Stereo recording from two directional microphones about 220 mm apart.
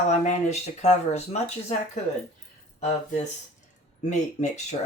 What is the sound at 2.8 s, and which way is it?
Speech, 30° left (ahead or behind).